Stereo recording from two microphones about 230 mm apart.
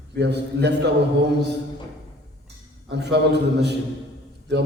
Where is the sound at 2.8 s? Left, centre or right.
Right.